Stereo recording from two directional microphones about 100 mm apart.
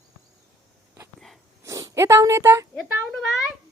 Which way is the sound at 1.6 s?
30° right (ahead or behind).